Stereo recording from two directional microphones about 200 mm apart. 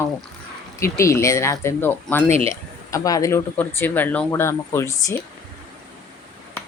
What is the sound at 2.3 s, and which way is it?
Speech, 30° right (ahead or behind).